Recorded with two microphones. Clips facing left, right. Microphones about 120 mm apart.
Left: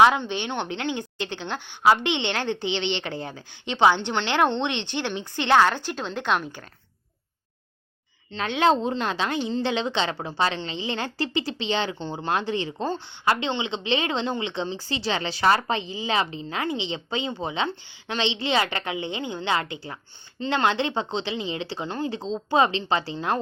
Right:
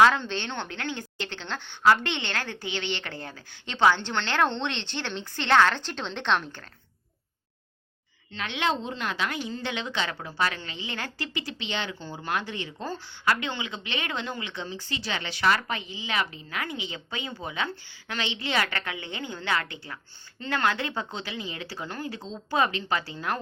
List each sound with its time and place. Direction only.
0.0 s a woman's voice: 15° left (ahead or behind)
8.3 s a woman's voice: 35° left (ahead or behind)